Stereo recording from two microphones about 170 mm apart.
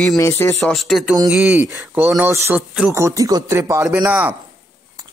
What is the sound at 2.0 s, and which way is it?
Speech, 10° right (ahead or behind).